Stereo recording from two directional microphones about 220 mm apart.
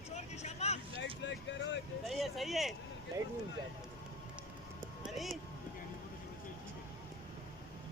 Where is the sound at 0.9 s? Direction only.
55° left (ahead or behind).